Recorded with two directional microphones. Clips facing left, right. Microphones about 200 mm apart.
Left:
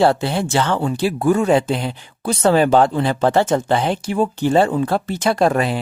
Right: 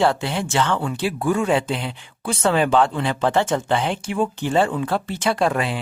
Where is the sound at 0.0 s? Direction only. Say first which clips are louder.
Left 4 dB; 35° left (ahead or behind).